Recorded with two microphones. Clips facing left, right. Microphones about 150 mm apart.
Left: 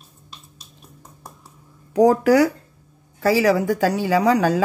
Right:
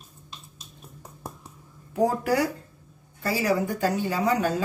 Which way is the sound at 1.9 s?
90° left.